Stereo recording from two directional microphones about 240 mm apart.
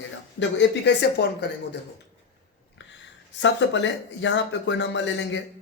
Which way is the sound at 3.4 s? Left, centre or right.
Left.